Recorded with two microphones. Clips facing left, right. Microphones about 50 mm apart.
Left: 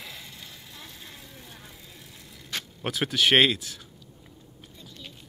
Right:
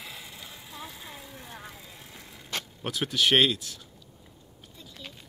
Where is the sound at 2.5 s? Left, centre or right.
Right.